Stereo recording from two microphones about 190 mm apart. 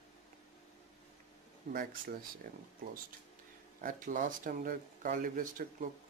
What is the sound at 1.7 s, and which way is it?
Speech, 50° right (ahead or behind).